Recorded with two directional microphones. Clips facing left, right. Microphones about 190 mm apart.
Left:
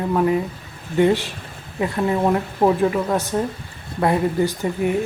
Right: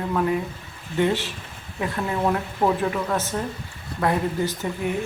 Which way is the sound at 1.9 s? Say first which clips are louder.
Left 5 dB; 25° left (ahead or behind).